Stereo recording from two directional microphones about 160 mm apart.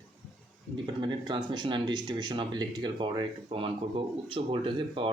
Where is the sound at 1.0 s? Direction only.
30° right (ahead or behind).